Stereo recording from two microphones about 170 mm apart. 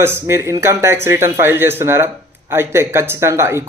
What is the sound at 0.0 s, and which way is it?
A man's voice, 15° right (ahead or behind).